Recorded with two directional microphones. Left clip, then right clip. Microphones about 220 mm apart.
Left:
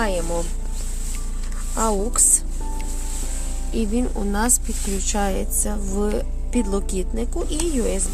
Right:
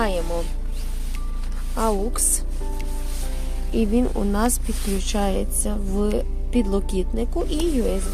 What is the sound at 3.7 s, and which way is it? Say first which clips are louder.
Speech: right 3 dB; 5° right (ahead or behind).